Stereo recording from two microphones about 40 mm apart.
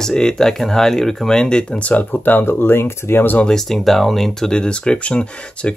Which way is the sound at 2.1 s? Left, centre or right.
Left.